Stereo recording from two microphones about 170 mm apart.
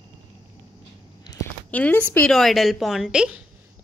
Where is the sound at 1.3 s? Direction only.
25° left (ahead or behind).